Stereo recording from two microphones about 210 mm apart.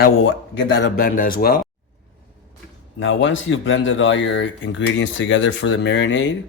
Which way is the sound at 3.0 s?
65° left (ahead or behind).